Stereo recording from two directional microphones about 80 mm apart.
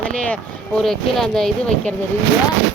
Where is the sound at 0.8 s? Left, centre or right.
Centre.